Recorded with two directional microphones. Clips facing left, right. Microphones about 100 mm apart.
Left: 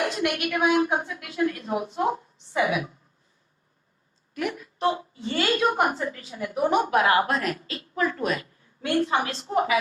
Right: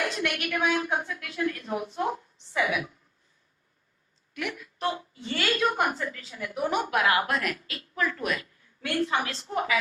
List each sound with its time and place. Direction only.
0.0 s a woman's voice: 25° left (ahead or behind)
4.4 s a woman's voice: 35° left (ahead or behind)